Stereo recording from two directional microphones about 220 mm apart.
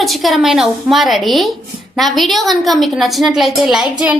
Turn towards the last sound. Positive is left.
turn(degrees=-5)  # may be behind; listen again after turning